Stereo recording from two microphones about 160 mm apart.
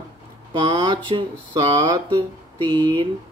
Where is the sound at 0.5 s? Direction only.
30° right (ahead or behind).